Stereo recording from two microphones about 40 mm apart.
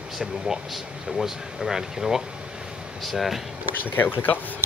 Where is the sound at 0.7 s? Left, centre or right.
Centre.